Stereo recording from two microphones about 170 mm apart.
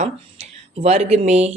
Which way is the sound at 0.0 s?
40° right (ahead or behind).